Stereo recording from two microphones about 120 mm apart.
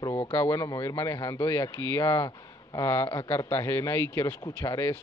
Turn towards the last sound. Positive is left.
turn(degrees=20)  # may be behind; listen again after turning